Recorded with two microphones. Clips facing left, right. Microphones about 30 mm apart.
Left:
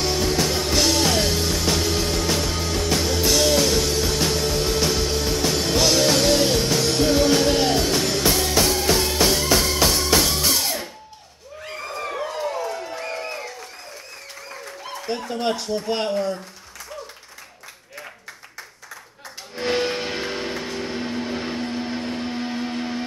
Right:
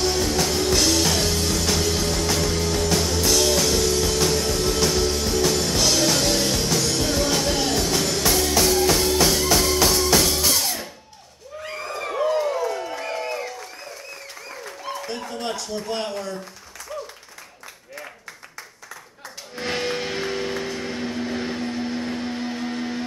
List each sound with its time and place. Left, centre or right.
0.0 s music: centre
15.0 s chuckle: left
19.5 s a sound: centre